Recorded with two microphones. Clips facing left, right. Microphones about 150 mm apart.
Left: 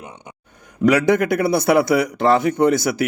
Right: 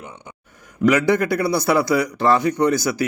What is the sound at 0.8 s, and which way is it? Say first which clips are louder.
A man's voice: left 1 dB; 20° left (ahead or behind).